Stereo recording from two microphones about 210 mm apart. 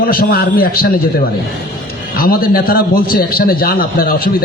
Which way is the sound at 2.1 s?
45° left (ahead or behind).